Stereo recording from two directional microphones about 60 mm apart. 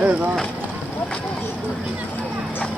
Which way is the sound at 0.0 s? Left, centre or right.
Right.